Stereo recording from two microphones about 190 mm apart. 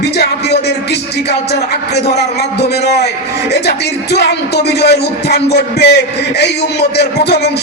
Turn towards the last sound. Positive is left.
turn(degrees=60)  # may be behind; listen again after turning